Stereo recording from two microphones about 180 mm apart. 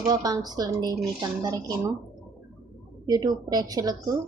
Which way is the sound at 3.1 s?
20° right (ahead or behind).